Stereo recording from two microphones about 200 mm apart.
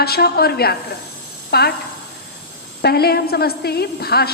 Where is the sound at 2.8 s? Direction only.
50° left (ahead or behind).